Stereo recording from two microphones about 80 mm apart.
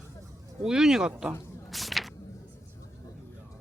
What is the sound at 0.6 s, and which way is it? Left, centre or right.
Speech, centre.